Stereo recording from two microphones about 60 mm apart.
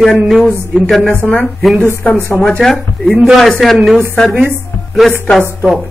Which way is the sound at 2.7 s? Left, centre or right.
Centre.